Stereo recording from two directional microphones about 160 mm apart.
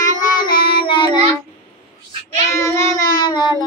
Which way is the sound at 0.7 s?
35° left (ahead or behind).